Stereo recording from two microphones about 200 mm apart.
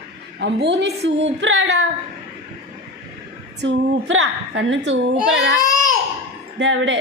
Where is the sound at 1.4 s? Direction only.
70° right (ahead or behind).